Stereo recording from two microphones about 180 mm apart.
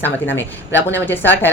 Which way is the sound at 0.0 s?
10° left (ahead or behind).